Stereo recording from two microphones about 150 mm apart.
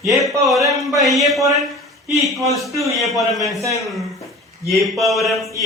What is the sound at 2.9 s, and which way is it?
Speech, centre (ahead or behind).